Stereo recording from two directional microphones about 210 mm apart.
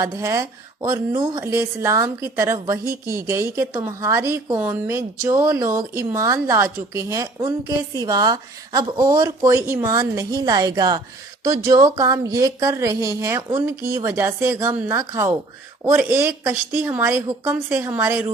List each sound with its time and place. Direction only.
0.0 s speech: 15° right (ahead or behind)